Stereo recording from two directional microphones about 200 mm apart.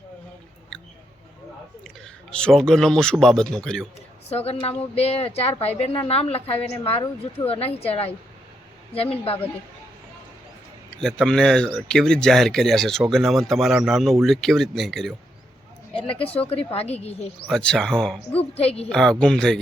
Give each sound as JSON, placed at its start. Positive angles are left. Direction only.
{"t": 2.3, "sound": "speech", "side_deg": 5}
{"t": 4.4, "sound": "a woman's voice", "side_deg": 30}
{"t": 10.9, "sound": "speech", "side_deg": 5}
{"t": 16.1, "sound": "a woman's voice", "side_deg": 30}
{"t": 17.4, "sound": "speech", "side_deg": 5}
{"t": 18.5, "sound": "a woman's voice", "side_deg": 30}
{"t": 18.9, "sound": "speech", "side_deg": 0}